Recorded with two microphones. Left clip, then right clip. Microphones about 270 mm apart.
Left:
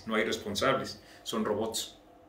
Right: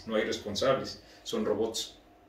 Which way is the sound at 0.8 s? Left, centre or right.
Left.